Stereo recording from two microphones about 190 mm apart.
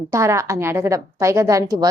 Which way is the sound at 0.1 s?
15° right (ahead or behind).